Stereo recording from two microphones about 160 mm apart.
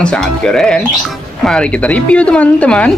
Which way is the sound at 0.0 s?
5° left (ahead or behind).